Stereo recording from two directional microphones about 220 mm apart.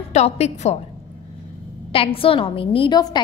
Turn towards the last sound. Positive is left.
turn(degrees=20)  # may be behind; listen again after turning